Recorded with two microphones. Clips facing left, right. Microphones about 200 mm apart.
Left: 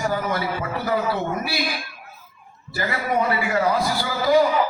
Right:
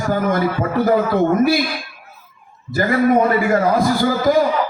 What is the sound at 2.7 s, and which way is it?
A man's voice, 50° right (ahead or behind).